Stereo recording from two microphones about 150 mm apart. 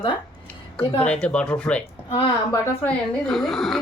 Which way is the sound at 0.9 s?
5° left (ahead or behind).